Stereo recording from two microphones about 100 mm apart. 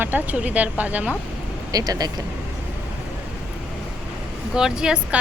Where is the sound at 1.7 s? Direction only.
40° right (ahead or behind).